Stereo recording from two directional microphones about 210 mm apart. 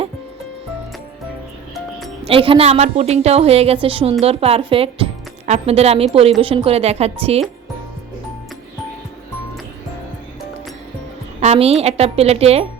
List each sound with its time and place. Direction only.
2.2 s a woman's voice: 25° right (ahead or behind)
11.3 s a woman's voice: 30° right (ahead or behind)